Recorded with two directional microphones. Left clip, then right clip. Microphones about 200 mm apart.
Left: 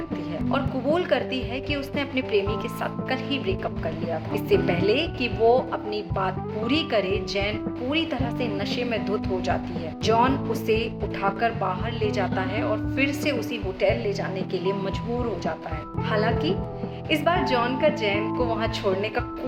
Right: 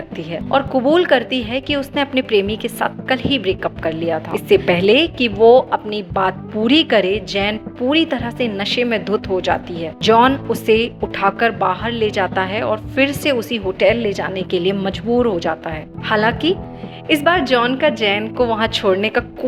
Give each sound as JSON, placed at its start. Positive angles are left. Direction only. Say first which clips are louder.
{"t": 0.5, "sound": "a woman's voice", "louder": "right 11 dB", "side_deg": -40}